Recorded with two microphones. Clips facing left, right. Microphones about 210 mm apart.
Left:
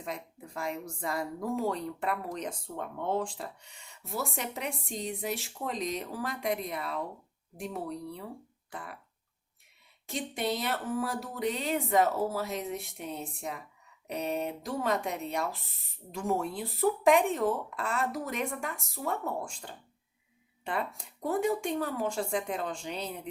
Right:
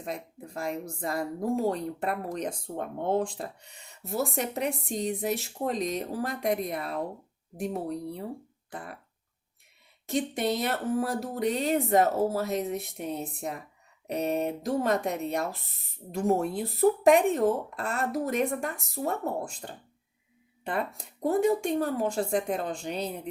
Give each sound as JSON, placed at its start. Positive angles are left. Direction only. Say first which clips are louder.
{"t": 0.0, "sound": "speech", "louder": "right 3 dB", "side_deg": -40}
{"t": 8.7, "sound": "cough", "louder": "right 3 dB", "side_deg": -45}
{"t": 10.1, "sound": "speech", "louder": "right 5 dB", "side_deg": -45}